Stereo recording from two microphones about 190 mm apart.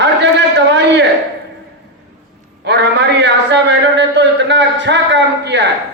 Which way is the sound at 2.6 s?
65° right (ahead or behind).